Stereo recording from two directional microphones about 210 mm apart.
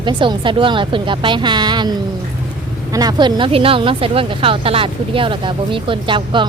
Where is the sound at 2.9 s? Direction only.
20° right (ahead or behind).